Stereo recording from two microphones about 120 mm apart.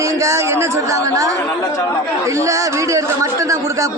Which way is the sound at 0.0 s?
25° right (ahead or behind).